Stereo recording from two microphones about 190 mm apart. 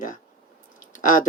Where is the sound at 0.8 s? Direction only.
45° left (ahead or behind).